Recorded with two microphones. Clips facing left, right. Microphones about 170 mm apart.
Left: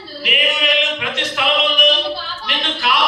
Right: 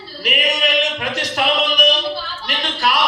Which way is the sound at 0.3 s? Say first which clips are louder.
Even; 40° right (ahead or behind).